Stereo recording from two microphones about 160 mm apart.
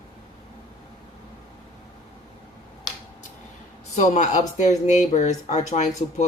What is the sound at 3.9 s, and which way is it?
Speech, 50° left (ahead or behind).